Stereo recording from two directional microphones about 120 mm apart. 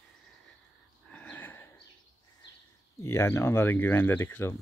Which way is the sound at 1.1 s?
15° left (ahead or behind).